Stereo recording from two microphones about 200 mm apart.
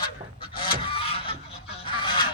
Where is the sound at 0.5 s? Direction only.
25° left (ahead or behind).